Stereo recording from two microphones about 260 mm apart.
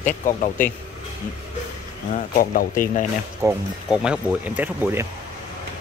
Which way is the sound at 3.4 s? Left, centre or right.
Centre.